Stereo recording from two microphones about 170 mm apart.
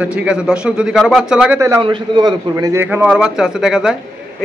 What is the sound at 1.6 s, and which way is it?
Speech, 20° right (ahead or behind).